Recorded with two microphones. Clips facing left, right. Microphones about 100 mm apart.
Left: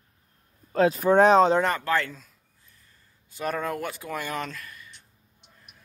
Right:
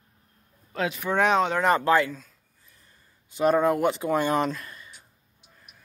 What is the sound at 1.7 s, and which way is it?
Speech, 20° right (ahead or behind).